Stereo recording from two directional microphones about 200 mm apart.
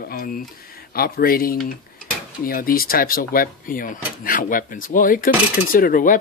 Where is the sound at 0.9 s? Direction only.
50° left (ahead or behind).